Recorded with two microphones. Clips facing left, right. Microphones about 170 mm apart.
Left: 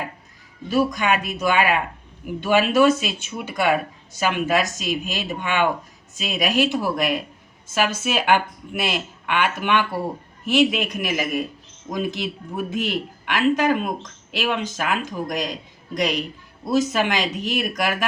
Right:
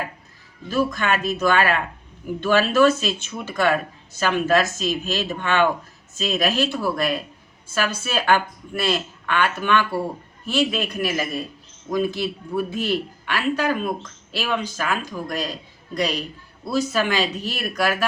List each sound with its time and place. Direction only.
0.7 s speech: 15° left (ahead or behind)